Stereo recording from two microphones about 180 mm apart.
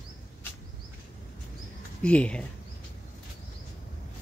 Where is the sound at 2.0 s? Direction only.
5° left (ahead or behind).